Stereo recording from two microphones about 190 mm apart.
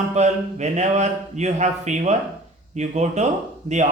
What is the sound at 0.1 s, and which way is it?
A man's voice, 35° right (ahead or behind).